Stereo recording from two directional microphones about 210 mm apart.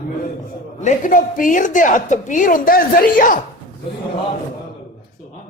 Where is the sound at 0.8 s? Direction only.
40° left (ahead or behind).